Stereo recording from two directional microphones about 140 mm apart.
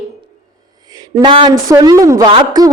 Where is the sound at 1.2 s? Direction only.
35° right (ahead or behind).